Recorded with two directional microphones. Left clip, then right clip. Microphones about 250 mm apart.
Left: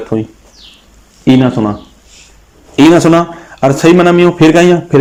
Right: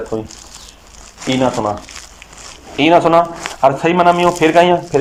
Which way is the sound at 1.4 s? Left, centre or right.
Left.